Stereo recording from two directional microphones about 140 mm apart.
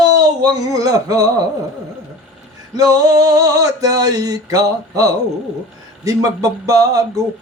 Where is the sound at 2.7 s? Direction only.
25° right (ahead or behind).